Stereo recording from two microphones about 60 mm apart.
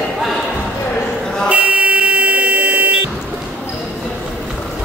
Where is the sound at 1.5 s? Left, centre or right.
Right.